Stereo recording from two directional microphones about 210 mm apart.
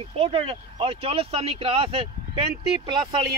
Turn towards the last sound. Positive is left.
turn(degrees=-20)  # may be behind; listen again after turning